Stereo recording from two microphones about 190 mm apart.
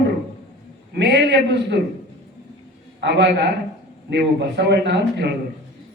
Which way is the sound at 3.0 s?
65° right (ahead or behind).